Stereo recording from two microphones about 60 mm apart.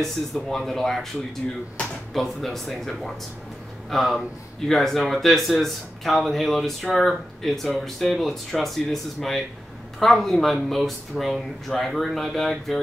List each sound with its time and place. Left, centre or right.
0.0 s speech: centre
2.1 s speech: centre